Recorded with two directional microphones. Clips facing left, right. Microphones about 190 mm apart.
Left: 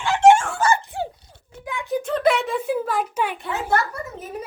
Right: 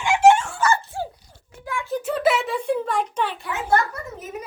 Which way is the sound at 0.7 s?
15° left (ahead or behind).